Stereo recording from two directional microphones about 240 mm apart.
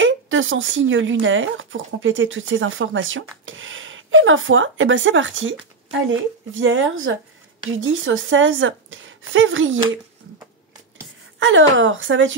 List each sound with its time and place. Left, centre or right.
0.0 s speech: right
11.3 s speech: right